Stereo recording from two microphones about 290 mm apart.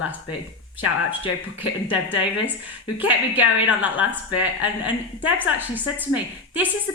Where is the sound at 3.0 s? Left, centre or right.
Centre.